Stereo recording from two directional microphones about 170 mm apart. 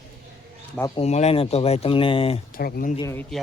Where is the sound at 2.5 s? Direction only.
60° left (ahead or behind).